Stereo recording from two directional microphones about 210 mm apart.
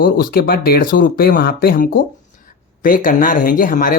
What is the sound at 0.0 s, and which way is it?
Speech, 45° left (ahead or behind).